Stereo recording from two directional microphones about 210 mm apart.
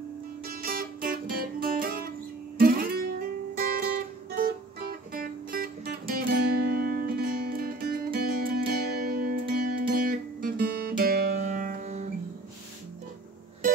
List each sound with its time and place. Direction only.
0.5 s music: 45° right (ahead or behind)
2.6 s guitar: 45° right (ahead or behind)
4.4 s music: 45° right (ahead or behind)